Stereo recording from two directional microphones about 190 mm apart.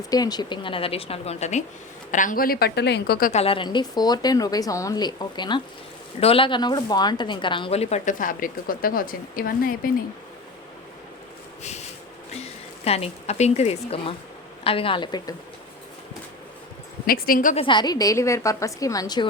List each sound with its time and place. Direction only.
0.1 s a woman's voice: 20° left (ahead or behind); by 3.4 s 45° left (ahead or behind)
3.4 s a woman's voice: 25° left (ahead or behind); by 9.9 s 50° left (ahead or behind)
12.8 s a woman's voice: 30° left (ahead or behind)
17.1 s a woman's voice: 50° left (ahead or behind)
17.6 s speech: 25° left (ahead or behind)